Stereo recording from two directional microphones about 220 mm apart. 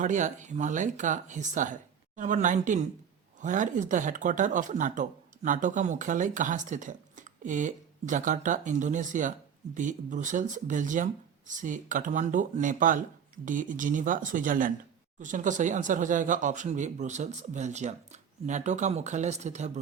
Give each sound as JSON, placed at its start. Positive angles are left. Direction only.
{"t": 0.0, "sound": "speech", "side_deg": -35}